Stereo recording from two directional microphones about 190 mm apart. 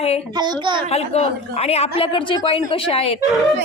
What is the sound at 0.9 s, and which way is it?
A woman's voice, 35° left (ahead or behind).